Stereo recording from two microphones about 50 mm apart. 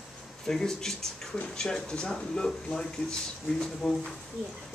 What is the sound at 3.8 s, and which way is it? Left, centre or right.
Speech, centre.